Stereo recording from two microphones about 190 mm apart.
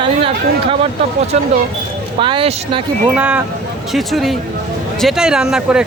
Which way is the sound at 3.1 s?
5° right (ahead or behind).